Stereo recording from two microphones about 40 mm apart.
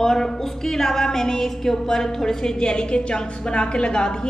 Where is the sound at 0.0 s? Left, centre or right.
Centre.